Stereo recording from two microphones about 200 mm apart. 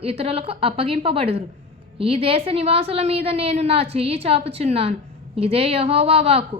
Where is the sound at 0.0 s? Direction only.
30° right (ahead or behind).